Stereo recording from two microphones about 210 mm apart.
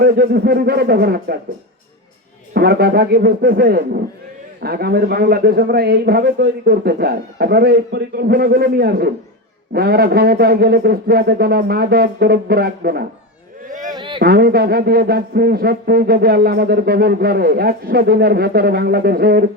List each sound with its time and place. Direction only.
0.0 s a man's voice: 45° right (ahead or behind)
2.5 s a man's voice: 50° right (ahead or behind)
13.9 s a sound: 25° right (ahead or behind)
14.2 s a man's voice: 50° right (ahead or behind)